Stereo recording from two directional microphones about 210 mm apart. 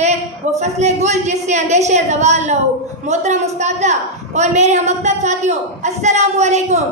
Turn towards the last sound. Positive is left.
turn(degrees=-30)  # may be behind; listen again after turning